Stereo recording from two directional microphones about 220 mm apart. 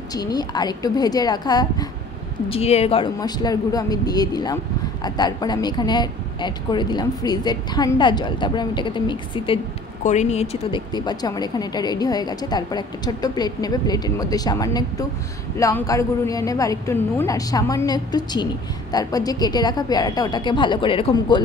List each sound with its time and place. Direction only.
0.1 s a woman's voice: 15° left (ahead or behind)
2.5 s a woman's voice: 30° left (ahead or behind)